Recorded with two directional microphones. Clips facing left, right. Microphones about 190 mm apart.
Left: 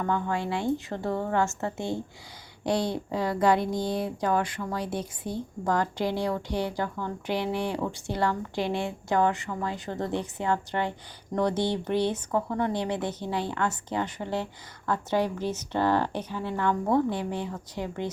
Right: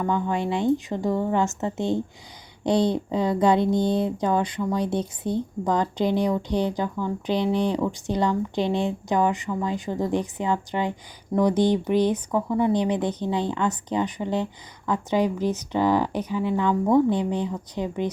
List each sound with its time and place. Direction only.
0.0 s speech: 15° right (ahead or behind)